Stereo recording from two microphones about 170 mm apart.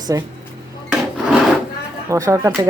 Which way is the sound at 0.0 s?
20° right (ahead or behind).